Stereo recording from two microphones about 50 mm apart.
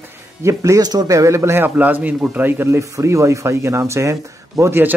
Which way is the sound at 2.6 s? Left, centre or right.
Right.